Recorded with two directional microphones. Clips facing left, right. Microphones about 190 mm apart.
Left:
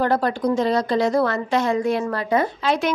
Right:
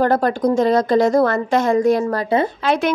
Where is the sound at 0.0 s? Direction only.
45° right (ahead or behind).